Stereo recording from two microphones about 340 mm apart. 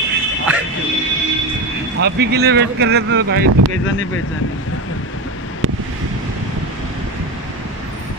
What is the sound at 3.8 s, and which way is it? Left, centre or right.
Speech, left.